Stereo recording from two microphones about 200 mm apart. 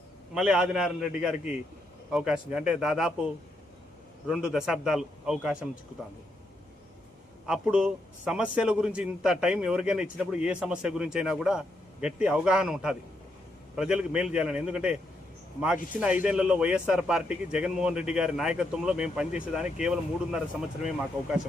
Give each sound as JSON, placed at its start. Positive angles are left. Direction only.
{"t": 0.3, "sound": "a man's voice", "side_deg": -5}
{"t": 4.3, "sound": "a man's voice", "side_deg": -5}
{"t": 7.4, "sound": "a man's voice", "side_deg": -5}
{"t": 16.0, "sound": "a man's voice", "side_deg": -5}